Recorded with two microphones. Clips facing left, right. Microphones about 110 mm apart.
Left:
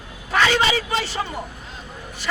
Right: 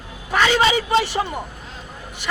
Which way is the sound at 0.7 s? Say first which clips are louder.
Right 5 dB; 20° right (ahead or behind).